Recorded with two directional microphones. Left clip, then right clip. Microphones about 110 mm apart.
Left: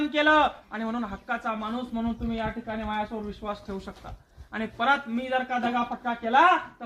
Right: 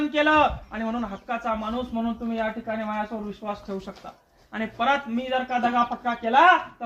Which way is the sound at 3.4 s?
25° right (ahead or behind).